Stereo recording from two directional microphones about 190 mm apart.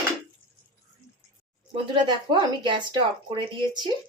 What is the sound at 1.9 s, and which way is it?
Speech, 25° right (ahead or behind).